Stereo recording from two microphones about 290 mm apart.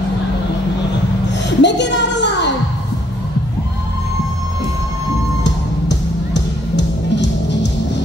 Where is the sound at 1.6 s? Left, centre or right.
Left.